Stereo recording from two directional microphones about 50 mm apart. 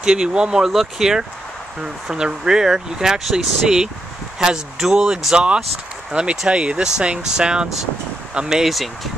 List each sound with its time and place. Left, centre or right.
0.0 s speech: centre
0.7 s speech: centre